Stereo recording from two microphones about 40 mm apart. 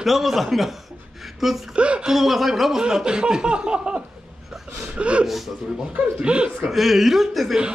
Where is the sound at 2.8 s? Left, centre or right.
Centre.